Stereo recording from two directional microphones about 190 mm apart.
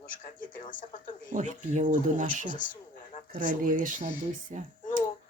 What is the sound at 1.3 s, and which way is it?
Speech, 40° right (ahead or behind).